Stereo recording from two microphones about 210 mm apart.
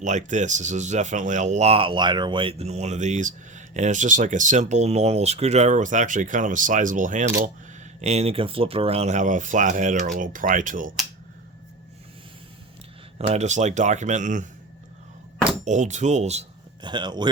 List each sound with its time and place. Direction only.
0.0 s speech: 35° right (ahead or behind)
13.1 s speech: 35° right (ahead or behind)
15.6 s speech: 35° right (ahead or behind)